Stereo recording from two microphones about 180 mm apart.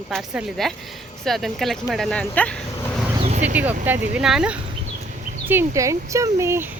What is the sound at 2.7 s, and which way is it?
Dog, 15° left (ahead or behind).